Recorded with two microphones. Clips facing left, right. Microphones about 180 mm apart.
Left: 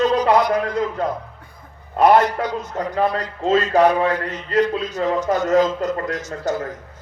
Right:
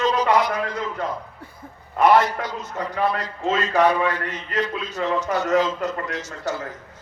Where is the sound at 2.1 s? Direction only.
45° left (ahead or behind).